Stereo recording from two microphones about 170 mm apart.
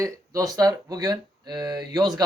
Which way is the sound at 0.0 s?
20° right (ahead or behind).